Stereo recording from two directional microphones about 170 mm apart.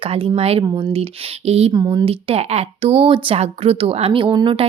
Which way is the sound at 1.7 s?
25° right (ahead or behind).